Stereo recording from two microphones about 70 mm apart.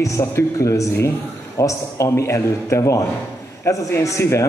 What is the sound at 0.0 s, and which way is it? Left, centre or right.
A man's voice, left.